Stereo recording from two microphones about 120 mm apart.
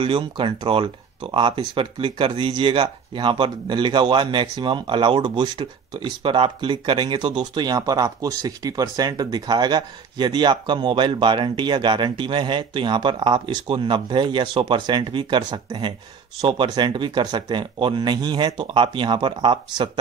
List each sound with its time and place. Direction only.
0.0 s speech: 45° right (ahead or behind)